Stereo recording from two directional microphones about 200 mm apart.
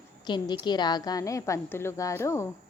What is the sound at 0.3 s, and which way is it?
A woman's voice, 20° left (ahead or behind).